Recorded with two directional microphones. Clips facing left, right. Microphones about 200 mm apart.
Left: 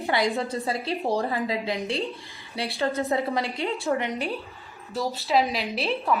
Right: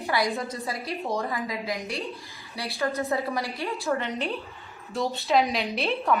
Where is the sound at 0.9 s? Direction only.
30° left (ahead or behind).